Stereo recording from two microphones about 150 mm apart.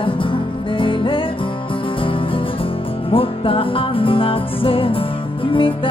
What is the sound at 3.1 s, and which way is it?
Music, 35° left (ahead or behind).